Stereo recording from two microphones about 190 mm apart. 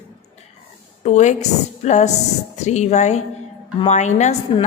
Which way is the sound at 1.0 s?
35° left (ahead or behind).